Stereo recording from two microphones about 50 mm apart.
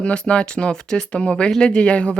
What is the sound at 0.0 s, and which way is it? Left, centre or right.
Speech, left.